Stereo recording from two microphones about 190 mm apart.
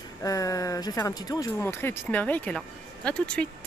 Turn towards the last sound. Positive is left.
turn(degrees=5)  # may be behind; listen again after turning